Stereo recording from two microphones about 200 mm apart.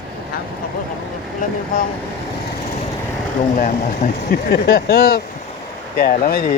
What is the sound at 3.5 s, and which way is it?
Speech, 45° left (ahead or behind).